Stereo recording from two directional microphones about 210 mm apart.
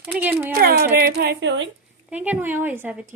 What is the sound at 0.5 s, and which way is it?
Speech, 45° right (ahead or behind).